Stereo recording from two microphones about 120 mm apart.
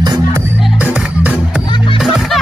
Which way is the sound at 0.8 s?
10° right (ahead or behind).